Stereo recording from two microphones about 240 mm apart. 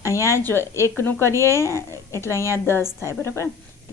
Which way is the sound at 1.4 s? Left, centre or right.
Centre.